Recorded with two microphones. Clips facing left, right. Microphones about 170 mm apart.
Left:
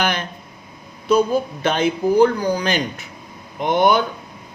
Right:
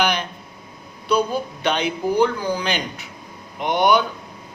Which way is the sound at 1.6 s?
45° left (ahead or behind).